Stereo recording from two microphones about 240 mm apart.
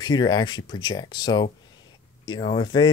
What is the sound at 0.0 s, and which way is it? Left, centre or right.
Speech, centre.